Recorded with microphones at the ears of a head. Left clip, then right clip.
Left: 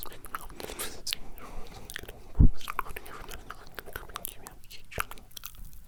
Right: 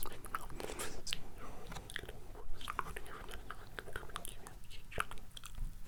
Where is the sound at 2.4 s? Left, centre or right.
Left.